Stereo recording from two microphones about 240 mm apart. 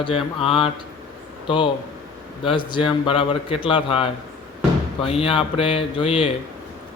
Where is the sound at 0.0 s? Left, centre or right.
Left.